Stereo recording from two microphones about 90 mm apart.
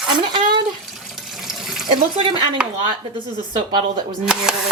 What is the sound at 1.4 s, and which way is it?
Water, 5° right (ahead or behind).